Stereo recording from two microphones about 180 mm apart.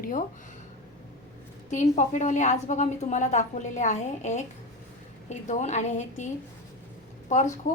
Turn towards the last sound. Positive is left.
turn(degrees=45)  # may be behind; listen again after turning